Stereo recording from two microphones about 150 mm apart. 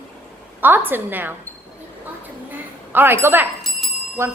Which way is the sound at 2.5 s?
15° right (ahead or behind).